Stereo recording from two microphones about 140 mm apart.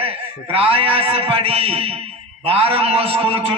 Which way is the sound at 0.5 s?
40° right (ahead or behind).